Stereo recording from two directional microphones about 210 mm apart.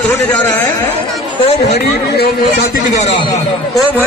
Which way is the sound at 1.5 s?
30° left (ahead or behind).